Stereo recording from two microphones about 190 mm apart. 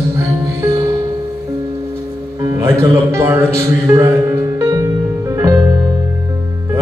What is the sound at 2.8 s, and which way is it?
Speech, 15° right (ahead or behind).